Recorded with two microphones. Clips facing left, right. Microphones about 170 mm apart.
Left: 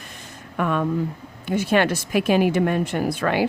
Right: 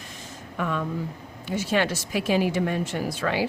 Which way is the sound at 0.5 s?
60° left (ahead or behind).